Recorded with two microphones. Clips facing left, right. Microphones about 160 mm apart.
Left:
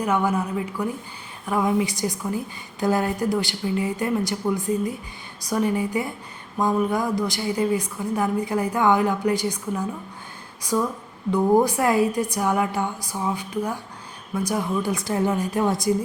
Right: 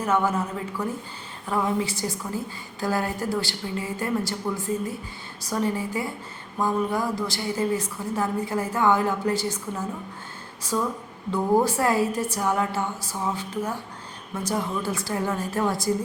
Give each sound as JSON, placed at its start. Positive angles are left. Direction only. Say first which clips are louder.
{"t": 0.0, "sound": "a woman's voice", "louder": "left 1 dB", "side_deg": 15}
{"t": 10.6, "sound": "a woman's voice", "louder": "left 3 dB", "side_deg": 15}